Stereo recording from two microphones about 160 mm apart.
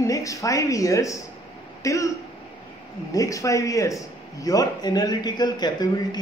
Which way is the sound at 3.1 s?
20° left (ahead or behind).